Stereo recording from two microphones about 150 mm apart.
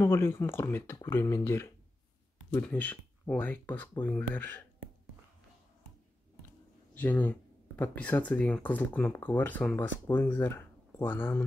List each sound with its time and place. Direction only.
0.0 s speech: 15° left (ahead or behind)
6.9 s speech: 10° left (ahead or behind)